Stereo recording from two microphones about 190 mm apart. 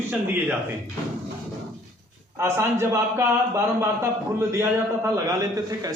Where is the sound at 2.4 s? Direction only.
15° right (ahead or behind).